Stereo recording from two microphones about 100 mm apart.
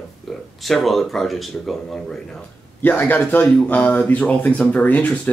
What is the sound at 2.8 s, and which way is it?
Speech, 20° left (ahead or behind).